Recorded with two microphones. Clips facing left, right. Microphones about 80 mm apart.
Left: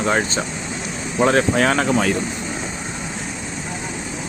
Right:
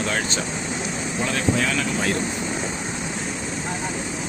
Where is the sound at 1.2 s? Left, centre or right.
Left.